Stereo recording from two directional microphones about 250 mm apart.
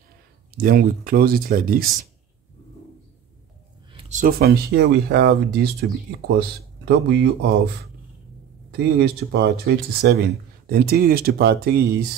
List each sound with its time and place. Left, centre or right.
0.6 s speech: right
3.9 s speech: right
8.7 s speech: right